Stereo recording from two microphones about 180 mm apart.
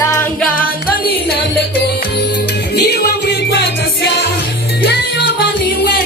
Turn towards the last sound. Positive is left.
turn(degrees=65)  # may be behind; listen again after turning